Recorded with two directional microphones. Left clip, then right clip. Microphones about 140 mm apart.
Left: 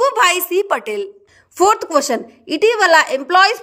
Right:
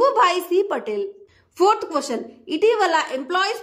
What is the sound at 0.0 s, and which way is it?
A woman's voice, 30° left (ahead or behind).